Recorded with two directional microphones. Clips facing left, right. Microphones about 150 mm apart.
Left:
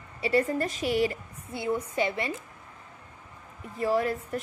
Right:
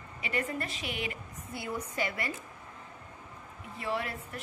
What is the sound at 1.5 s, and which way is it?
Speech, 25° left (ahead or behind).